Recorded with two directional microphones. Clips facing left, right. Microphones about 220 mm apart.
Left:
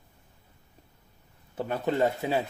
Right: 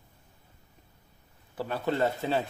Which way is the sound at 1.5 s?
20° left (ahead or behind).